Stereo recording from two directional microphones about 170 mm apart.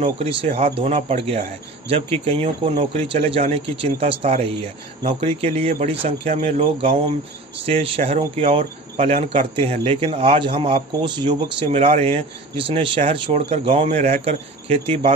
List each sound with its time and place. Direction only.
0.0 s speech: 35° right (ahead or behind)
11.6 s speech: 40° right (ahead or behind)